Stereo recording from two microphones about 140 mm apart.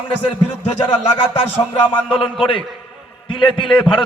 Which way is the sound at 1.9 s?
40° left (ahead or behind).